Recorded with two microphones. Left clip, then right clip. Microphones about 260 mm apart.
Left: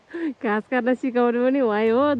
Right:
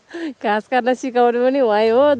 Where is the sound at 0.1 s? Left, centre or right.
Centre.